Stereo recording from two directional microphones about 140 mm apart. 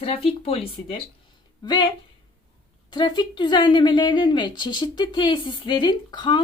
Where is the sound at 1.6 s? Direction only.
35° left (ahead or behind).